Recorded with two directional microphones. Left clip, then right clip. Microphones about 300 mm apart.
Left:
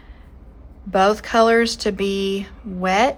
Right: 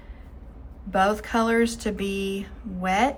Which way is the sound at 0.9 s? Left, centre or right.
Left.